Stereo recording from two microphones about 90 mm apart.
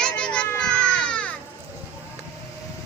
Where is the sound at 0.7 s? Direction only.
10° left (ahead or behind).